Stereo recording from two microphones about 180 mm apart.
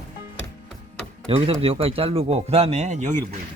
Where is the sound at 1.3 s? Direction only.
35° right (ahead or behind).